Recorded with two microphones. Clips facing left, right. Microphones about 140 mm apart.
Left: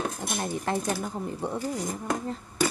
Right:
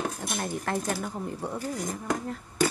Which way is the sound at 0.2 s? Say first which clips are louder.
Left 1 dB; 20° left (ahead or behind).